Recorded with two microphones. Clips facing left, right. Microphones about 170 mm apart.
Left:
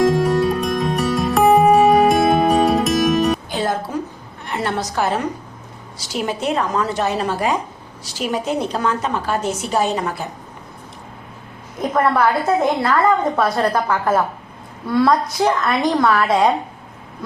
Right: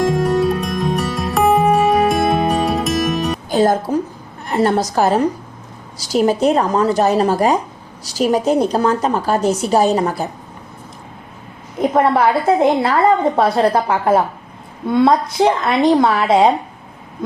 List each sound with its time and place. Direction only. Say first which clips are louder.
0.0 s music: even; centre (ahead or behind)
3.5 s music: right 7 dB; 40° right (ahead or behind)
4.4 s a woman's voice: right 7 dB; 40° right (ahead or behind)
11.8 s a woman's voice: right 3 dB; 25° right (ahead or behind)